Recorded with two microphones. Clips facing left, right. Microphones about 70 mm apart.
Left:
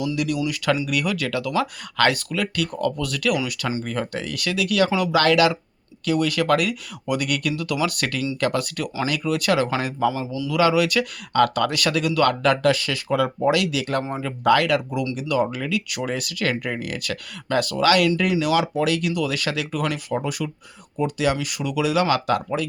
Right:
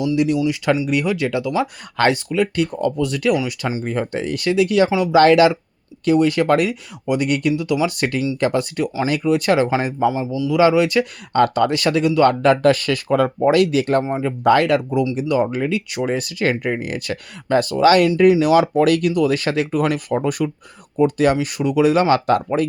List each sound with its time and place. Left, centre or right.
0.2 s speech: right
10.2 s a man's voice: centre
10.5 s speech: right